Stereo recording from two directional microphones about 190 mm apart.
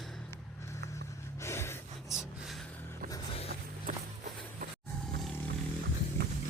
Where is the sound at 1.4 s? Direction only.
15° left (ahead or behind).